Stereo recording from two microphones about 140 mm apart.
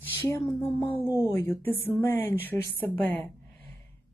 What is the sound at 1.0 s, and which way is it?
Speech, 15° right (ahead or behind).